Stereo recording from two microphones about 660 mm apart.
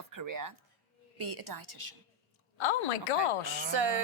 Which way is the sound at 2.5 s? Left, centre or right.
Left.